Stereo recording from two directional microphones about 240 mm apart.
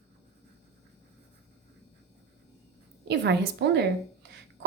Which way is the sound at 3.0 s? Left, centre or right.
Right.